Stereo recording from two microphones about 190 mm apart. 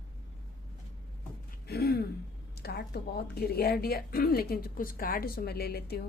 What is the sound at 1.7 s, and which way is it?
Throat clearing, 55° left (ahead or behind).